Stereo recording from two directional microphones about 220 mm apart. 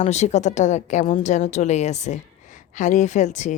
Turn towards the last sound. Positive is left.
turn(degrees=35)  # may be behind; listen again after turning